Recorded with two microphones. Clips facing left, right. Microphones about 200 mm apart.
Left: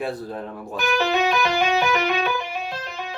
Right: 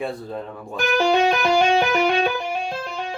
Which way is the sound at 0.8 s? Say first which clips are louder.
Right 3 dB; 50° right (ahead or behind).